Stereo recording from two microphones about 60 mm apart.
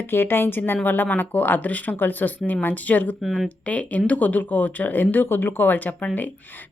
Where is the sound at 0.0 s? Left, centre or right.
Left.